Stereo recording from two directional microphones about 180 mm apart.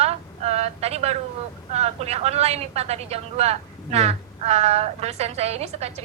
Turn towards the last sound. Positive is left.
turn(degrees=-35)  # may be behind; listen again after turning